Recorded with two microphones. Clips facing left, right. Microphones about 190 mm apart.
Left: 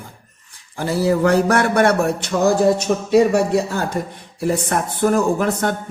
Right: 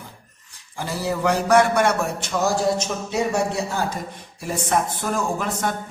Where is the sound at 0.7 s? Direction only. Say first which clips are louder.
Left 8 dB; 55° left (ahead or behind).